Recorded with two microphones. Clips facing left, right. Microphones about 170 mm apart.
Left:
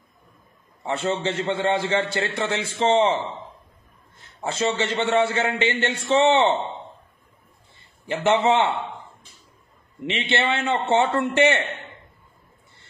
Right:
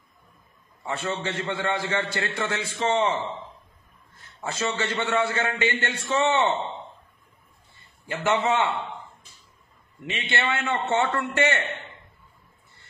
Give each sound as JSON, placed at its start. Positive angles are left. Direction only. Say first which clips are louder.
{"t": 0.8, "sound": "a man's voice", "louder": "left 5 dB", "side_deg": 25}
{"t": 4.4, "sound": "a man's voice", "louder": "left 4 dB", "side_deg": 25}
{"t": 8.1, "sound": "a man's voice", "louder": "left 4 dB", "side_deg": 25}
{"t": 10.4, "sound": "a man's voice", "louder": "left 3 dB", "side_deg": 25}